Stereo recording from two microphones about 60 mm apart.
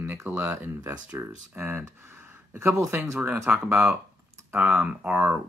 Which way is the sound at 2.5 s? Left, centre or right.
Right.